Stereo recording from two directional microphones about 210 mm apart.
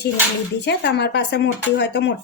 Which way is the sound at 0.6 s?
55° left (ahead or behind).